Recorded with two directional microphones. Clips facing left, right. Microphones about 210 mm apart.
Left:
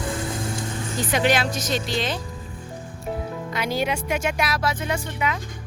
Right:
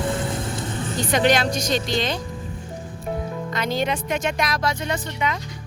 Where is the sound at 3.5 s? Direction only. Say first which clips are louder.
Right 1 dB; 10° left (ahead or behind).